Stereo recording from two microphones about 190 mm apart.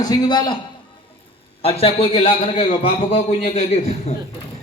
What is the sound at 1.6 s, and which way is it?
A man's voice, 30° left (ahead or behind).